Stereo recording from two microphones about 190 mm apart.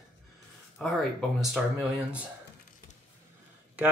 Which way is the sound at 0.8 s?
Centre (ahead or behind).